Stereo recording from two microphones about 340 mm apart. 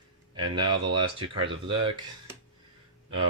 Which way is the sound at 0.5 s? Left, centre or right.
Centre.